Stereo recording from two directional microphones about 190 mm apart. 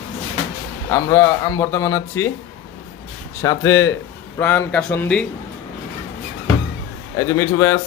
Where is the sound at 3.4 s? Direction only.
20° left (ahead or behind).